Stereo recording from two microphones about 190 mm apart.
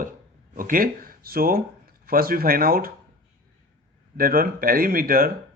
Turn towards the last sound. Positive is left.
turn(degrees=-50)  # may be behind; listen again after turning